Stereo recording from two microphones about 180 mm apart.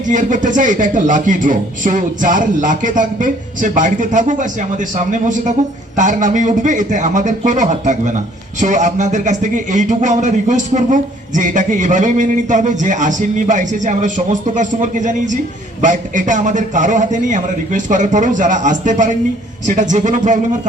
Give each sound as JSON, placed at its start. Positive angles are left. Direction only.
{"t": 0.0, "sound": "a man's voice", "side_deg": -45}